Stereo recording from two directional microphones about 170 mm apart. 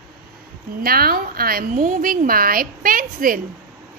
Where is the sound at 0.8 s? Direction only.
60° right (ahead or behind).